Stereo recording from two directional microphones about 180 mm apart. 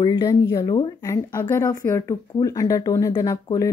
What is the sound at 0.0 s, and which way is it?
Speech, 20° left (ahead or behind).